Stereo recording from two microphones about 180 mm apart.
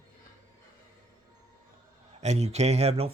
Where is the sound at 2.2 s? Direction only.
40° right (ahead or behind).